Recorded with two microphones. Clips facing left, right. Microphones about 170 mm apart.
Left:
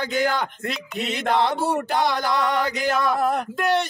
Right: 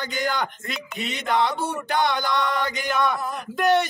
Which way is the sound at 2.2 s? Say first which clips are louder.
Left 2 dB; 70° left (ahead or behind).